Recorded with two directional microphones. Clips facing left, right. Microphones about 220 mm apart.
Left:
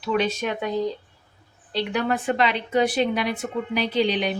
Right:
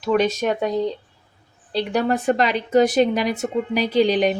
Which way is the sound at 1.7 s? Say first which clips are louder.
Right 4 dB; 40° right (ahead or behind).